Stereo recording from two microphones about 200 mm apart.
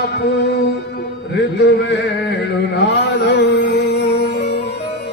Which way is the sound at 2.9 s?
60° left (ahead or behind).